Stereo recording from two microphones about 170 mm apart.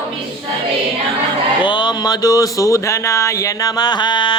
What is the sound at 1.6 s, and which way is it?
Speech, 25° left (ahead or behind).